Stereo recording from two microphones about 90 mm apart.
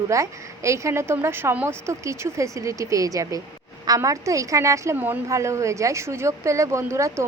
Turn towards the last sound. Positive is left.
turn(degrees=-30)  # may be behind; listen again after turning